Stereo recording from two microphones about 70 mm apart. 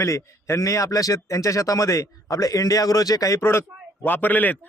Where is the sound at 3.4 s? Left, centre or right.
Left.